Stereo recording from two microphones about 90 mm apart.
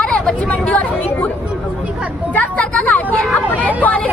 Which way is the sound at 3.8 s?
15° left (ahead or behind).